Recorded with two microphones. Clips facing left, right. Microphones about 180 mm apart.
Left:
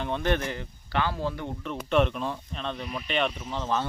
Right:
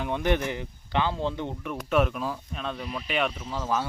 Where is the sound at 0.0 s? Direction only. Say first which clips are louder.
Right 1 dB; 15° right (ahead or behind).